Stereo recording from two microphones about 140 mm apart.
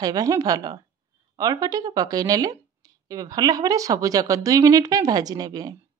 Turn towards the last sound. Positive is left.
turn(degrees=-25)  # may be behind; listen again after turning